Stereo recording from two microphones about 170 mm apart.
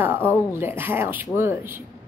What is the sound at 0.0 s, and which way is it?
Speech, 15° right (ahead or behind).